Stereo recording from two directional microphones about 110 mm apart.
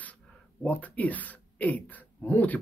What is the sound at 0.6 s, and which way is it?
Speech, 15° left (ahead or behind).